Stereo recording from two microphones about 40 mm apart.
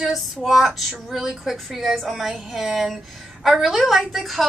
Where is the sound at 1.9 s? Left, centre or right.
Centre.